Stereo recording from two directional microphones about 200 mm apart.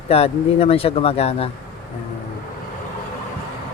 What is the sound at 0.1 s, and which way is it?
Speech, 30° left (ahead or behind).